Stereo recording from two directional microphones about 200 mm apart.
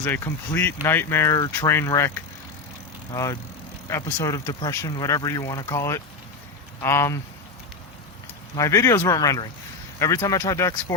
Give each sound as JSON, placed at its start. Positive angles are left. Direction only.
{"t": 0.0, "sound": "speech", "side_deg": 10}
{"t": 8.5, "sound": "speech", "side_deg": 15}